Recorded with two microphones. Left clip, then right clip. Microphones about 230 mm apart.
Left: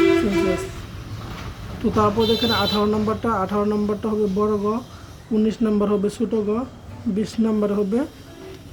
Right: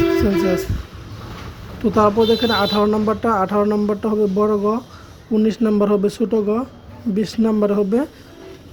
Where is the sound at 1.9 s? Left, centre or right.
Centre.